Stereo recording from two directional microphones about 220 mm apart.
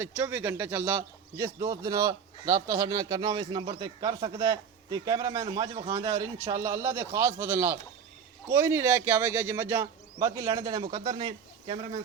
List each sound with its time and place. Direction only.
0.0 s speech: 10° right (ahead or behind)